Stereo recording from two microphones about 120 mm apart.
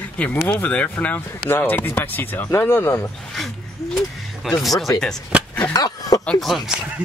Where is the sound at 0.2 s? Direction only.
15° left (ahead or behind).